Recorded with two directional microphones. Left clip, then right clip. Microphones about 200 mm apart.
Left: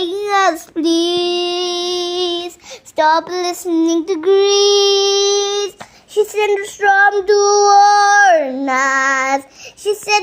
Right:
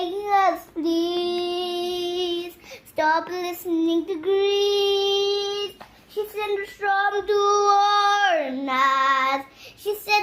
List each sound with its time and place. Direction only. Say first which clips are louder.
0.0 s child singing: left 6 dB; 55° left (ahead or behind); by 9.4 s 35° left (ahead or behind)